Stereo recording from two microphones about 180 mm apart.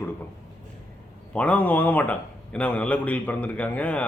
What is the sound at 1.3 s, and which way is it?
A man's voice, 5° left (ahead or behind).